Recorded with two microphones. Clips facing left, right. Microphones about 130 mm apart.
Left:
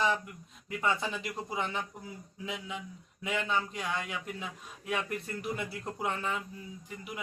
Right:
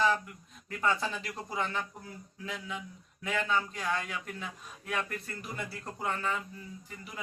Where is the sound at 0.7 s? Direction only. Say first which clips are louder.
Right 1 dB; 15° left (ahead or behind).